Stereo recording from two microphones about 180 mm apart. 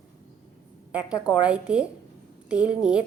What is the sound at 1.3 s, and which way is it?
A woman's voice, 5° right (ahead or behind).